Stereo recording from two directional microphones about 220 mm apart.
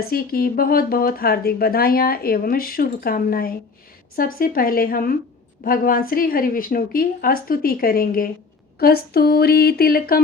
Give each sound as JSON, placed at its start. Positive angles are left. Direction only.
{"t": 0.0, "sound": "speech", "side_deg": 45}